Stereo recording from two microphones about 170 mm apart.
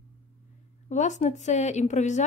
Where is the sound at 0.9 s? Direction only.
45° left (ahead or behind).